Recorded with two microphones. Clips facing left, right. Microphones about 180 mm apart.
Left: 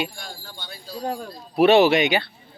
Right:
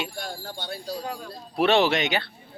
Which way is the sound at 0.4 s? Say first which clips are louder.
Right 6 dB; 55° right (ahead or behind).